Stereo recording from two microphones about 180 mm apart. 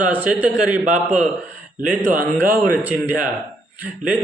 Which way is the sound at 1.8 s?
50° right (ahead or behind).